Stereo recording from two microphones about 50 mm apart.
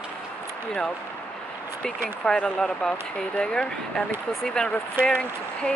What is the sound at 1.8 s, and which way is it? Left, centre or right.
Speech, centre.